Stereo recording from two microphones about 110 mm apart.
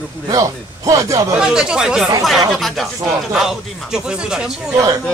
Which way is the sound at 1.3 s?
5° right (ahead or behind).